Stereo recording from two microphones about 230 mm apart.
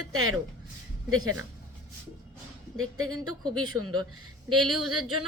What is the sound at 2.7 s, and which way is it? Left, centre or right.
A woman's voice, right.